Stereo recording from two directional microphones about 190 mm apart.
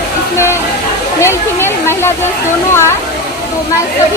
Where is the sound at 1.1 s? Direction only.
15° left (ahead or behind).